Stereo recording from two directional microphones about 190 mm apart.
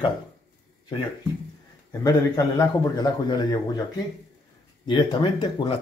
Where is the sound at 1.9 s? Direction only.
20° left (ahead or behind).